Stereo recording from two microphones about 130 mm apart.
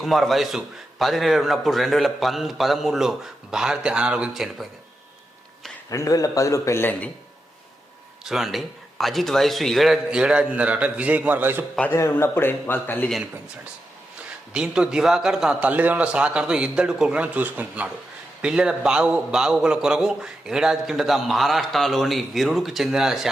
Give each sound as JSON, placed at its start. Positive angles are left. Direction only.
{"t": 0.0, "sound": "a man's voice", "side_deg": 0}
{"t": 5.9, "sound": "a man's voice", "side_deg": 25}
{"t": 8.2, "sound": "a man's voice", "side_deg": 0}
{"t": 11.9, "sound": "a man's voice", "side_deg": 20}
{"t": 14.5, "sound": "a man's voice", "side_deg": -5}